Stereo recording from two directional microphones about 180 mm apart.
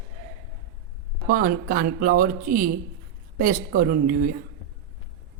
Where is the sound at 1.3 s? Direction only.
55° right (ahead or behind).